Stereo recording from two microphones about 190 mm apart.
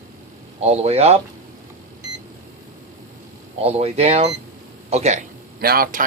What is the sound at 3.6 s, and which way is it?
Speech, 35° right (ahead or behind).